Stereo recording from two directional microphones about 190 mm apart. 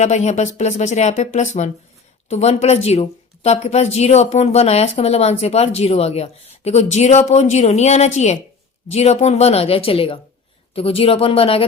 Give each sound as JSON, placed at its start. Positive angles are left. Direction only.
{"t": 0.0, "sound": "a woman's voice", "side_deg": 35}